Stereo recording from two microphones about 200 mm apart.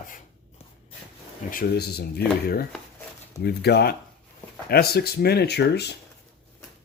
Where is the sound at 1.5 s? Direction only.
50° left (ahead or behind).